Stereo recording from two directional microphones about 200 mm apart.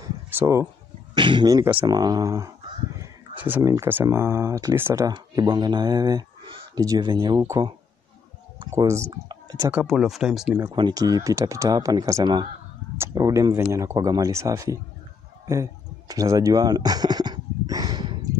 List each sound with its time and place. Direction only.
0.4 s speech: 15° right (ahead or behind)
10.7 s speech: 20° right (ahead or behind)
15.4 s a sound: 15° right (ahead or behind)